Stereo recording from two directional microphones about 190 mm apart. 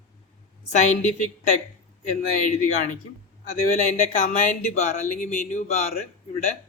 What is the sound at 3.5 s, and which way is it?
Speech, 40° left (ahead or behind).